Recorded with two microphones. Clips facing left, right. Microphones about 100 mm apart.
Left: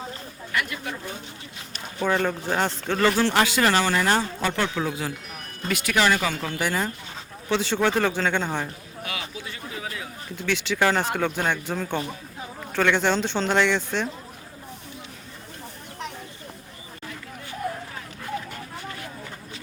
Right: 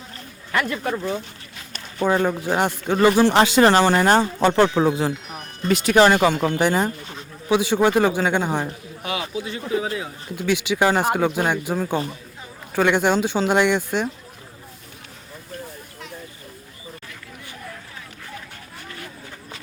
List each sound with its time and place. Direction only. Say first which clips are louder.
0.5 s speech: right 6 dB; 40° right (ahead or behind)
2.0 s speech: right 4 dB; 15° right (ahead or behind)
10.3 s speech: right 4 dB; 10° right (ahead or behind)